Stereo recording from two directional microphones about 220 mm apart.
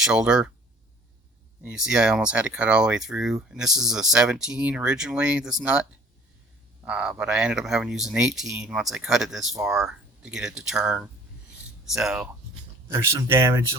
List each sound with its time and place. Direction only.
0.0 s speech: 5° right (ahead or behind)
1.6 s speech: 5° right (ahead or behind)
12.9 s speech: 15° right (ahead or behind)